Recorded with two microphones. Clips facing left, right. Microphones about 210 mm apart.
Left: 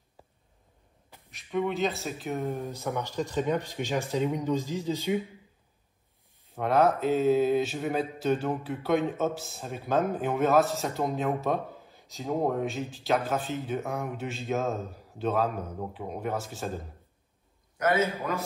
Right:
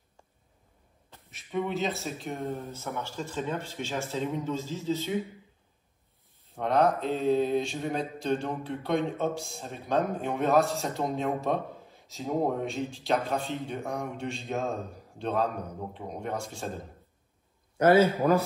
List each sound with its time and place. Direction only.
1.3 s mantra: centre (ahead or behind)
2.4 s speech: 15° left (ahead or behind)
6.5 s mantra: 5° left (ahead or behind)
17.7 s a man's voice: 30° right (ahead or behind)